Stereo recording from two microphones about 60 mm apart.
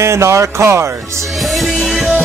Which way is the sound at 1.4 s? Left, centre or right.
Centre.